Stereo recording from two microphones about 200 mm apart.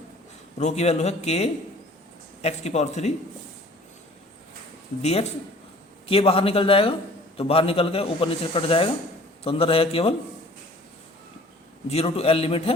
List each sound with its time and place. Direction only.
0.6 s speech: 35° left (ahead or behind)
6.1 s a man's voice: 30° left (ahead or behind)
11.9 s a man's voice: 30° left (ahead or behind)